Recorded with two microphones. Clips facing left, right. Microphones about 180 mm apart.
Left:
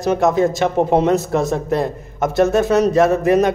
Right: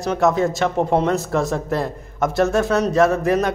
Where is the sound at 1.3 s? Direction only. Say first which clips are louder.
Left 3 dB; centre (ahead or behind).